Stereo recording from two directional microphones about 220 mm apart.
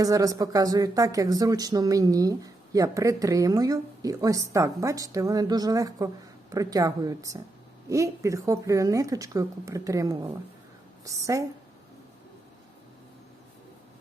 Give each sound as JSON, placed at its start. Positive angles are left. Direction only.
{"t": 0.0, "sound": "a woman's voice", "side_deg": -15}